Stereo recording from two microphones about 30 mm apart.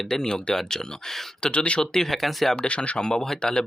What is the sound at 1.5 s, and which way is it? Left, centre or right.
Speech, left.